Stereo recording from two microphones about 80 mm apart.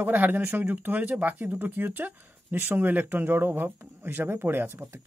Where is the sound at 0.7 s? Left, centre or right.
Right.